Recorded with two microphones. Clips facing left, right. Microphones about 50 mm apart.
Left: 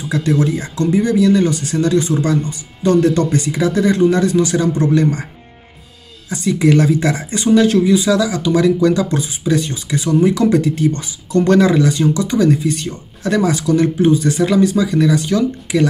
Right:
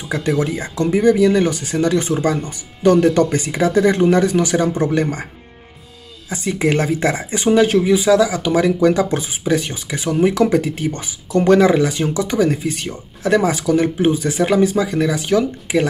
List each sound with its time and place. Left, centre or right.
0.1 s speech: right
6.2 s speech: right